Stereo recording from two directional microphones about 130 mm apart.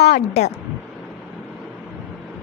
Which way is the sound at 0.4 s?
60° left (ahead or behind).